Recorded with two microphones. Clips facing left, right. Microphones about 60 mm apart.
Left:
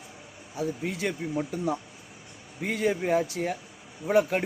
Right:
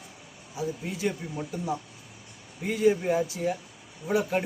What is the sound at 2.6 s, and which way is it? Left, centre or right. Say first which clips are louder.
Speech: right 3 dB; left.